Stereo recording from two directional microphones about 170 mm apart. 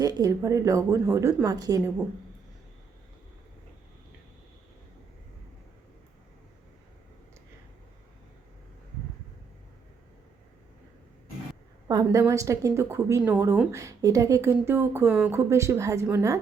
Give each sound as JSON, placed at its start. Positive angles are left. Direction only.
{"t": 0.0, "sound": "a woman's voice", "side_deg": -20}
{"t": 11.9, "sound": "a woman's voice", "side_deg": -20}